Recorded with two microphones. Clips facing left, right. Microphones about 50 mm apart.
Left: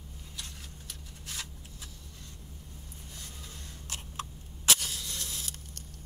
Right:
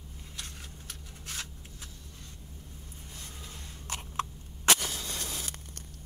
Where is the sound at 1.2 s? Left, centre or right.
Right.